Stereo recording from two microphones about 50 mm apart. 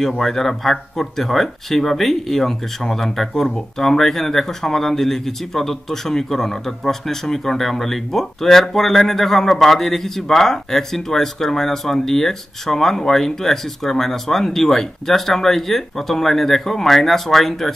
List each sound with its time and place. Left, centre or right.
0.2 s speech: centre